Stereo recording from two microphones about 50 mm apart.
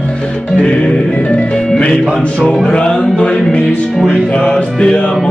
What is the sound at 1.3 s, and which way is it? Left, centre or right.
Music, left.